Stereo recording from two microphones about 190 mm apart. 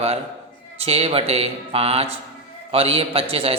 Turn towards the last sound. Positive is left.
turn(degrees=-30)  # may be behind; listen again after turning